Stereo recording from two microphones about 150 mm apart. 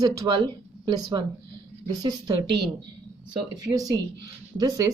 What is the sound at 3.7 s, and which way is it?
Speech, 25° right (ahead or behind).